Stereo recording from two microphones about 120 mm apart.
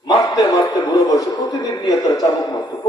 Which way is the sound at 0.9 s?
30° left (ahead or behind).